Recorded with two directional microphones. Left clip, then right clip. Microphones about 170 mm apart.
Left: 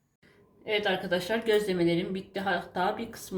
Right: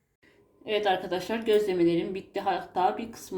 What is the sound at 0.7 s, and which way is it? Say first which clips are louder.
A woman's voice: right 1 dB; 25° right (ahead or behind).